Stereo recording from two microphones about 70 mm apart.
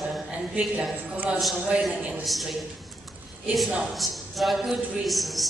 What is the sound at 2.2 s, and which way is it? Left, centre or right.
Speech, centre.